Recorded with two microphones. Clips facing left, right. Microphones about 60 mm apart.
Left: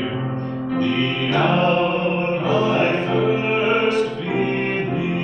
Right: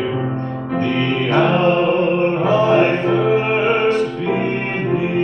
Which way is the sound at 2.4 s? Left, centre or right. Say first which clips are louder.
Right 4 dB; right.